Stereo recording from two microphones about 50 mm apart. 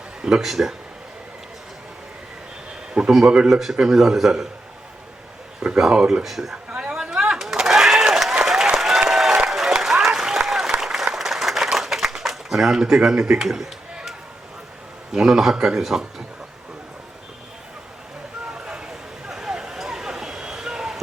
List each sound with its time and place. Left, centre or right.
0.2 s speech: centre
2.9 s speech: centre
3.5 s speech: centre
5.8 s speech: centre
6.2 s speech: centre
6.9 s a sound: centre
8.6 s applause: centre
15.1 s speech: centre
18.5 s a sound: centre